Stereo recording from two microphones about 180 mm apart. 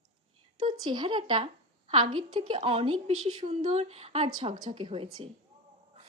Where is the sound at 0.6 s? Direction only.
25° right (ahead or behind).